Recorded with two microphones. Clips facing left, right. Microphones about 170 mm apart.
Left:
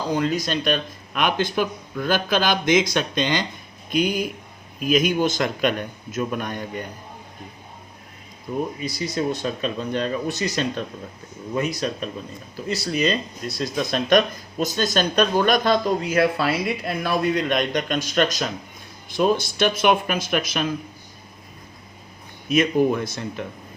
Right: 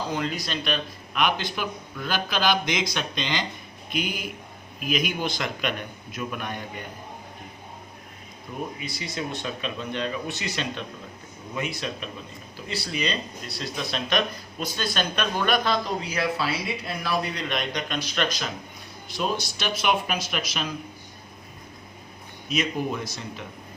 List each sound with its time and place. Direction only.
0.1 s speech: 45° left (ahead or behind)
8.5 s speech: 40° left (ahead or behind)
22.4 s speech: 55° left (ahead or behind)